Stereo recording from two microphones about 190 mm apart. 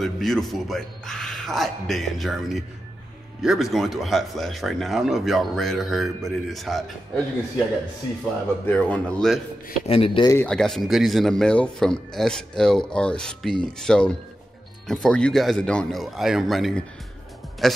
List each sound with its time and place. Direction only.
0.0 s speech: centre (ahead or behind)
8.6 s speech: 5° left (ahead or behind)
9.8 s speech: 30° left (ahead or behind)
10.3 s speech: 5° left (ahead or behind)